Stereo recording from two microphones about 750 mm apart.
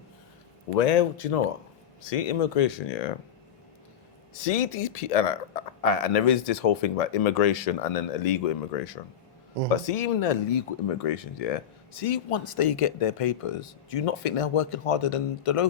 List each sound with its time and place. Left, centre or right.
0.8 s speech: left
4.4 s speech: left